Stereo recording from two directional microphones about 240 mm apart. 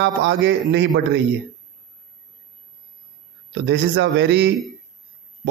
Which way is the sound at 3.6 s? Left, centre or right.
Right.